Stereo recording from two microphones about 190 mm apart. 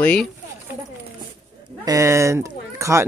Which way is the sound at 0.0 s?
5° left (ahead or behind).